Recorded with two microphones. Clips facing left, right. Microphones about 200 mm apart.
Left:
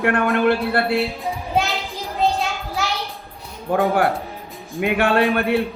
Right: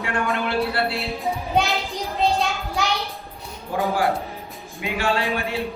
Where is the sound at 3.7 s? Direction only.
60° left (ahead or behind).